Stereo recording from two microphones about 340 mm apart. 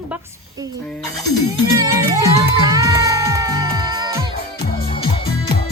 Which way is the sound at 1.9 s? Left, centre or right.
Centre.